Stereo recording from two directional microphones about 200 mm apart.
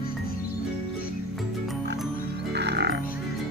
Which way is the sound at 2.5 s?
55° right (ahead or behind).